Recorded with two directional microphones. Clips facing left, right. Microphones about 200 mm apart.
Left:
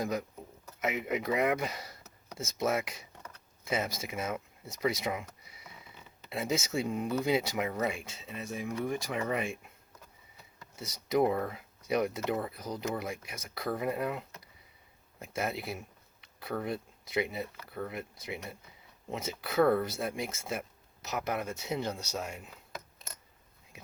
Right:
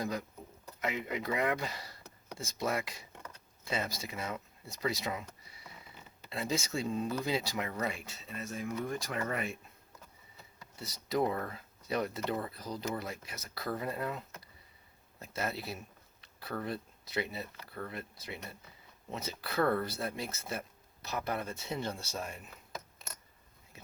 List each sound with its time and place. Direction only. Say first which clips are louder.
0.0 s speech: left 3 dB; 20° left (ahead or behind)
6.3 s speech: left 3 dB; 20° left (ahead or behind)
10.8 s speech: left 4 dB; 20° left (ahead or behind)